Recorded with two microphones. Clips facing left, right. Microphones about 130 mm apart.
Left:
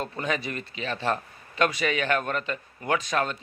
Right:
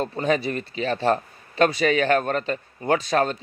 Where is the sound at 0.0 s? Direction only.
35° right (ahead or behind).